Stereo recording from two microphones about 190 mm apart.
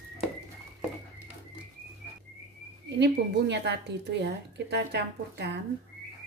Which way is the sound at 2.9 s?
65° right (ahead or behind).